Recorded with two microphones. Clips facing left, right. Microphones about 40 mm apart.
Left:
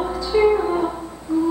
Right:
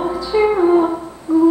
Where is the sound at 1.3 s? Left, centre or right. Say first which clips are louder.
Right 8 dB; right.